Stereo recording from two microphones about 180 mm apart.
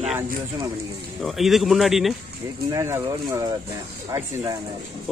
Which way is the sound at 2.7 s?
15° right (ahead or behind).